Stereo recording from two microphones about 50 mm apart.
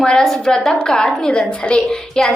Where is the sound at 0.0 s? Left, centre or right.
Centre.